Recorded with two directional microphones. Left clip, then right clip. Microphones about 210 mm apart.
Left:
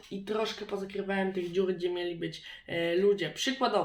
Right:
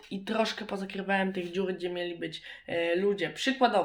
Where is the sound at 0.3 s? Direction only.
50° right (ahead or behind).